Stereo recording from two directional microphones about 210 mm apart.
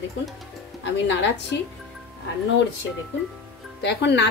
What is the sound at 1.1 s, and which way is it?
Speech, 55° left (ahead or behind).